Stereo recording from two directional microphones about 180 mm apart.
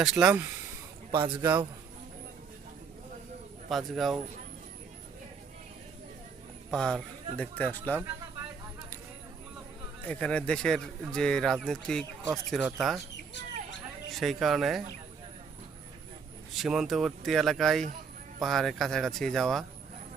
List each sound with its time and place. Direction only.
0.0 s speech: 5° right (ahead or behind)
1.1 s a man's voice: 25° right (ahead or behind)
1.4 s a man's voice: 15° right (ahead or behind)
3.7 s speech: centre (ahead or behind)
6.7 s speech: 5° left (ahead or behind)
10.1 s speech: 5° left (ahead or behind)
14.1 s speech: centre (ahead or behind)
16.6 s speech: centre (ahead or behind)